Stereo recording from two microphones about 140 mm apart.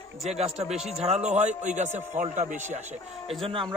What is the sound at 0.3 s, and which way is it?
A man's voice, 50° right (ahead or behind).